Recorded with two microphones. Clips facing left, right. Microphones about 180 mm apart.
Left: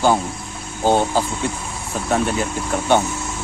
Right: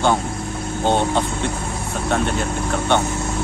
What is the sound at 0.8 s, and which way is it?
Speech, 5° left (ahead or behind).